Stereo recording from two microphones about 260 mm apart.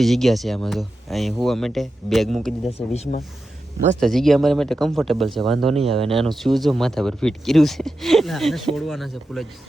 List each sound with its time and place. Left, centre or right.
0.0 s speech: centre
2.6 s speech: left
4.0 s speech: centre